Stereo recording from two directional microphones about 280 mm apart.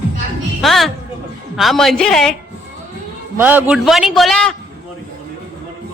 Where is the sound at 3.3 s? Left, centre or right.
Centre.